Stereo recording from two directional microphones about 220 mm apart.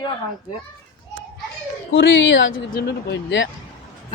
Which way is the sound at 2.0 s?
60° left (ahead or behind).